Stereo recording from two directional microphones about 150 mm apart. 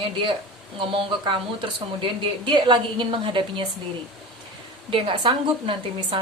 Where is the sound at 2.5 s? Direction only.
30° right (ahead or behind).